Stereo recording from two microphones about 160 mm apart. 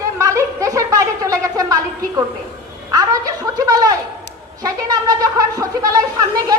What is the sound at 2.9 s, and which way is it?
A woman's voice, 20° right (ahead or behind).